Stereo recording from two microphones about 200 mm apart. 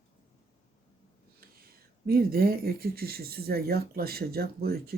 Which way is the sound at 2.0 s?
50° right (ahead or behind).